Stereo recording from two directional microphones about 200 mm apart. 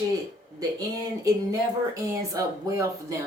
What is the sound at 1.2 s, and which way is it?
Speech, 15° right (ahead or behind).